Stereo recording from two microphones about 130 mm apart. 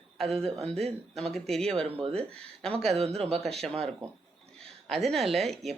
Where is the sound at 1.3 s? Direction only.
5° left (ahead or behind).